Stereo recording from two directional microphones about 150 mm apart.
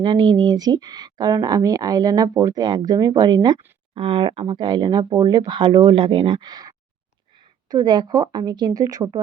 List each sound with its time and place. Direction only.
0.0 s speech: 30° right (ahead or behind)